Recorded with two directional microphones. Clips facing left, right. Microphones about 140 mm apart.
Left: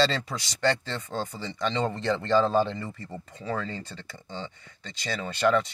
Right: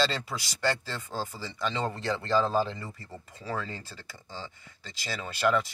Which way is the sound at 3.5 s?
5° right (ahead or behind).